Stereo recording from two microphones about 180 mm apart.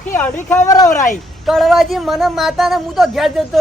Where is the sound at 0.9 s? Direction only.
45° left (ahead or behind).